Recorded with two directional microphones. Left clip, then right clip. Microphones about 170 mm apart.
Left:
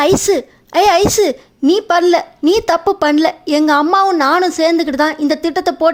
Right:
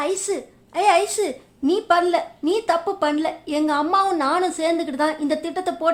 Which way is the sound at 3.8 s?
30° left (ahead or behind).